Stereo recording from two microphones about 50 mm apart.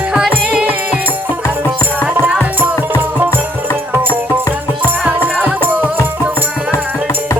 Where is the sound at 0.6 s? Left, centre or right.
Right.